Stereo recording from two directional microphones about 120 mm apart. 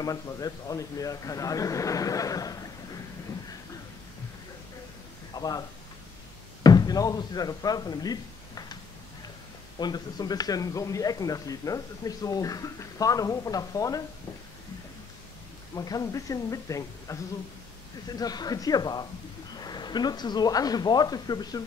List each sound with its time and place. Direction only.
0.0 s speech: 30° left (ahead or behind)
5.3 s speech: 35° left (ahead or behind)
9.8 s speech: 35° left (ahead or behind)
15.7 s speech: 30° left (ahead or behind)